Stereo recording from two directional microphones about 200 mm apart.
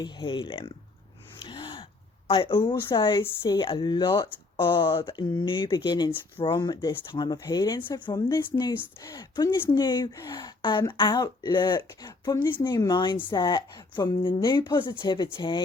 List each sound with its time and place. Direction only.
0.0 s a woman's voice: 25° left (ahead or behind)
1.5 s a sound: 25° left (ahead or behind)
2.2 s a woman's voice: 25° left (ahead or behind)